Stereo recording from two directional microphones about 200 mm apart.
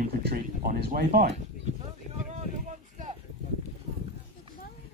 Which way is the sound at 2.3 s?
35° right (ahead or behind).